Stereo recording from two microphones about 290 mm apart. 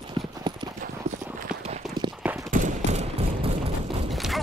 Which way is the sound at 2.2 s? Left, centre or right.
Centre.